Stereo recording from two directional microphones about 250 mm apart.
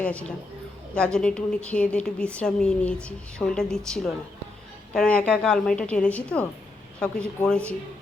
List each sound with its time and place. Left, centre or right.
0.0 s a woman's voice: centre